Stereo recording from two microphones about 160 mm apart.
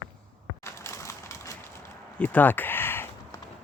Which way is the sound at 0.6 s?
20° left (ahead or behind).